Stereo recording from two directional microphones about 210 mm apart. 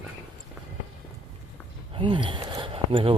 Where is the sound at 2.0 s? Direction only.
25° right (ahead or behind).